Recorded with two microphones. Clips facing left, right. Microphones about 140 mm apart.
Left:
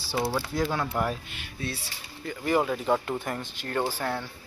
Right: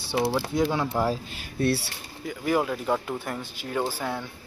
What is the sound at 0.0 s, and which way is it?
Speech, 20° right (ahead or behind).